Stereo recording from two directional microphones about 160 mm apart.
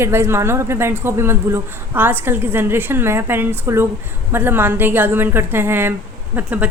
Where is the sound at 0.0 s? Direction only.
15° right (ahead or behind).